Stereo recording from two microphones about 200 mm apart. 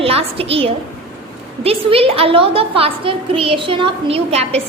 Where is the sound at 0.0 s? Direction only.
30° right (ahead or behind).